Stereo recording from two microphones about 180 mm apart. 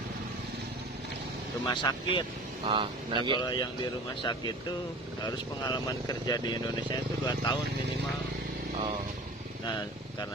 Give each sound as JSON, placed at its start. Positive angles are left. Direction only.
{"t": 1.6, "sound": "speech", "side_deg": 25}
{"t": 2.6, "sound": "speech", "side_deg": -25}
{"t": 3.3, "sound": "speech", "side_deg": 25}